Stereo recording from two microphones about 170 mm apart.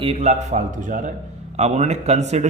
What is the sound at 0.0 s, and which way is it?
Speech, 35° right (ahead or behind).